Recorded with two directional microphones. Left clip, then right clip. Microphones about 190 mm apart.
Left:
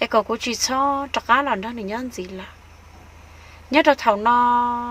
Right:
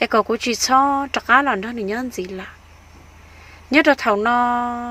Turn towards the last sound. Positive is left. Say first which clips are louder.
# left 1 dB
turn(degrees=-20)  # may be behind; listen again after turning